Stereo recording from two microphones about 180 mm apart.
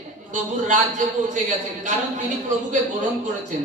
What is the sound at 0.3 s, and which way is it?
A man's voice, 45° right (ahead or behind).